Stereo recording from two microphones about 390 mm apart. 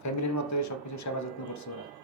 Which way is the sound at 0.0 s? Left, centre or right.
Left.